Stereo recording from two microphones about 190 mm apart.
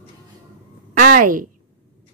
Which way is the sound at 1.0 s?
45° right (ahead or behind).